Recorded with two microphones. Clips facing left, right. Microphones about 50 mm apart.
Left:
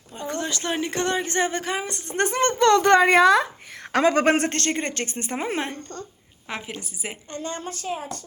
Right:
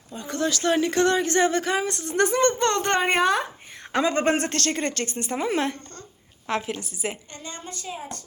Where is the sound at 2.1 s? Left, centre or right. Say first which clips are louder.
Right 1 dB; left.